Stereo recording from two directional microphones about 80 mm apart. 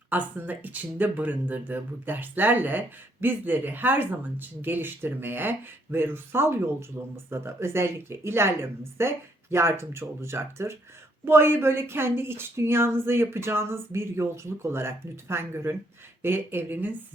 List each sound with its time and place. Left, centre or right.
0.1 s speech: right